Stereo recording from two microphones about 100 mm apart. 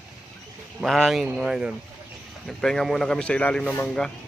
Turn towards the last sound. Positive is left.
turn(degrees=5)  # may be behind; listen again after turning